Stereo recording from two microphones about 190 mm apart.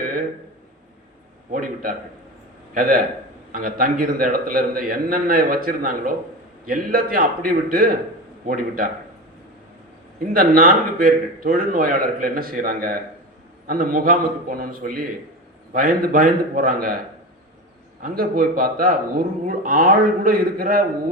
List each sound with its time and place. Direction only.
1.5 s a man's voice: 50° right (ahead or behind)
10.3 s a man's voice: 50° right (ahead or behind)
18.0 s a man's voice: 50° right (ahead or behind)